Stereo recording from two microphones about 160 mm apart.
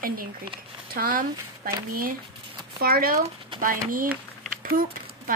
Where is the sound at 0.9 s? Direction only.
65° right (ahead or behind).